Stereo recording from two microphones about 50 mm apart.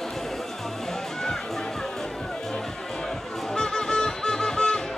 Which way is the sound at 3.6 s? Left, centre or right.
Centre.